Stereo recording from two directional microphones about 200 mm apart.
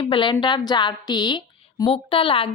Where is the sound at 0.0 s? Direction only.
25° left (ahead or behind).